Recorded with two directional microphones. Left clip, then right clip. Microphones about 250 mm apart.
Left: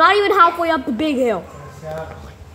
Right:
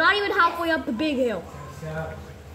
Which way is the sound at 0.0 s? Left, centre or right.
Left.